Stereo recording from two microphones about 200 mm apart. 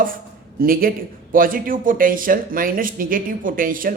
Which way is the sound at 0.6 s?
45° right (ahead or behind).